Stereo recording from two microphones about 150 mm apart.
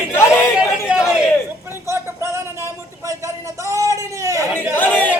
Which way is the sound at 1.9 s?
20° right (ahead or behind).